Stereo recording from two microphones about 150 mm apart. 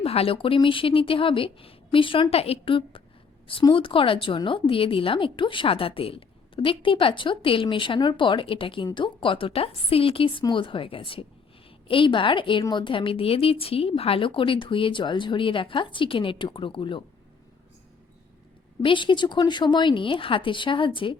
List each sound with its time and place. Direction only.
0.0 s a woman's voice: 40° left (ahead or behind)
18.8 s a woman's voice: 35° left (ahead or behind)